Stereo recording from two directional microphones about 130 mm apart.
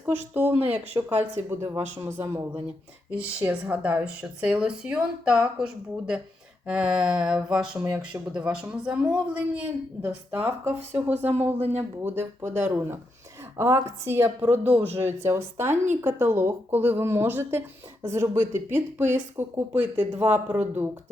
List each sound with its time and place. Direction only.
0.3 s a man's voice: 15° right (ahead or behind)